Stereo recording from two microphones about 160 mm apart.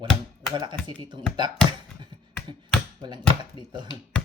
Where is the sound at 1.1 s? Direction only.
25° right (ahead or behind).